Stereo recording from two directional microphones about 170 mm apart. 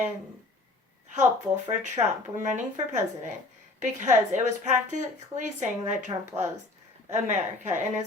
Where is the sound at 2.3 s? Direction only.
45° right (ahead or behind).